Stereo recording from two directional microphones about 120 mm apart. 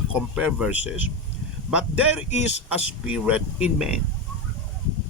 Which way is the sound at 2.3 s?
70° left (ahead or behind).